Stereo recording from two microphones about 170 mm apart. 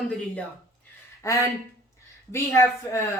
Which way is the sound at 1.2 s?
20° left (ahead or behind).